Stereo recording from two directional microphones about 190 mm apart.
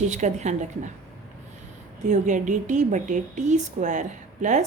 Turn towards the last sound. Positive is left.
turn(degrees=-40)  # may be behind; listen again after turning